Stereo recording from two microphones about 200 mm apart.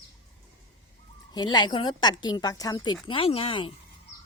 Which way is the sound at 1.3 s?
20° left (ahead or behind).